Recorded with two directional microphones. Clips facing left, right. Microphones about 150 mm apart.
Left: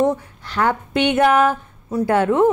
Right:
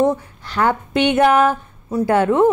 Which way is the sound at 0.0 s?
30° right (ahead or behind).